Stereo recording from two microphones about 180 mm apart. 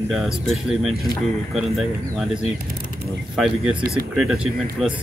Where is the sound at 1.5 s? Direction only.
Centre (ahead or behind).